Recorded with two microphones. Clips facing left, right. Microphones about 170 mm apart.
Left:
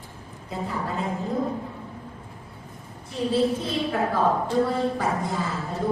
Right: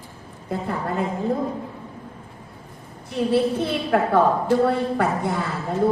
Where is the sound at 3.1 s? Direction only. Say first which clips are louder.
Right 3 dB; 65° right (ahead or behind).